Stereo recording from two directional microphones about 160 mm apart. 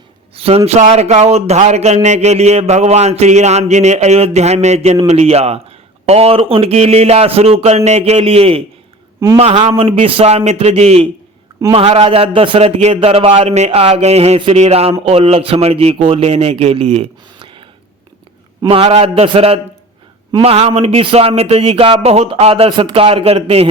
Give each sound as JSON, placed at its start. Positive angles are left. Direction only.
{"t": 0.3, "sound": "a man's voice", "side_deg": -35}